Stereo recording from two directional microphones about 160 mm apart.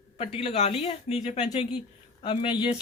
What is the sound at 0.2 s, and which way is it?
Speech, 35° left (ahead or behind).